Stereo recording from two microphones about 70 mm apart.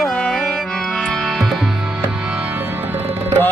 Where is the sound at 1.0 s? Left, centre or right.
Centre.